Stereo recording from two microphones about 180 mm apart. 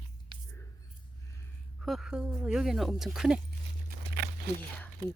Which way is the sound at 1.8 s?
Centre (ahead or behind).